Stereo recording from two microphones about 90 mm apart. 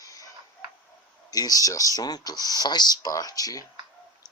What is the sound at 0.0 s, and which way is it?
Creak, 40° left (ahead or behind).